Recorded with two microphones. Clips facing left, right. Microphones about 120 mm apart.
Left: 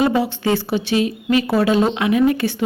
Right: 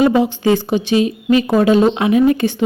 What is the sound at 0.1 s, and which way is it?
A woman's voice, 20° right (ahead or behind).